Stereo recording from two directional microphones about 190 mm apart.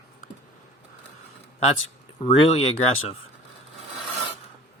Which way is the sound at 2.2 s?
30° left (ahead or behind).